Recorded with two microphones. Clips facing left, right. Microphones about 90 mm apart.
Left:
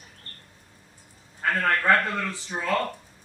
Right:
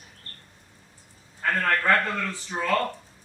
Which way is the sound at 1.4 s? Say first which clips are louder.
Even; 5° left (ahead or behind).